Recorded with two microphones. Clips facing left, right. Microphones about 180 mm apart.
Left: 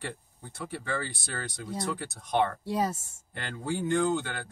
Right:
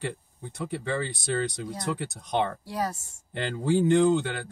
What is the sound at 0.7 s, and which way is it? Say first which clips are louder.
Speech: right 4 dB; 20° right (ahead or behind).